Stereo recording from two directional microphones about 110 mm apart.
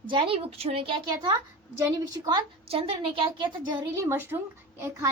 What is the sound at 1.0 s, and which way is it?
Speech, 45° right (ahead or behind).